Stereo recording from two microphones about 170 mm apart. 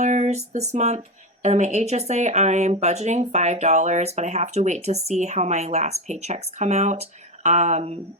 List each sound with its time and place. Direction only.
0.0 s speech: 45° right (ahead or behind)